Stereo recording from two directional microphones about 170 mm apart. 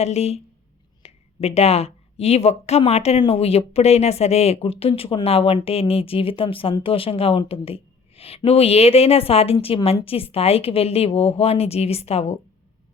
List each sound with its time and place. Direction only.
0.0 s speech: 40° left (ahead or behind)